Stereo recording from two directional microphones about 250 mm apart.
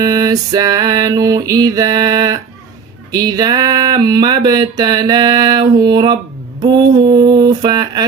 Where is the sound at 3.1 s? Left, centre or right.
Centre.